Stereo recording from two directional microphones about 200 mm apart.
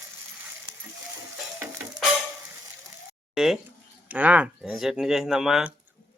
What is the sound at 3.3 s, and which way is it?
Speech, centre (ahead or behind).